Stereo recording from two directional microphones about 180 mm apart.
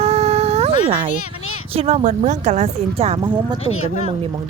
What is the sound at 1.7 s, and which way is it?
Speech, 40° right (ahead or behind).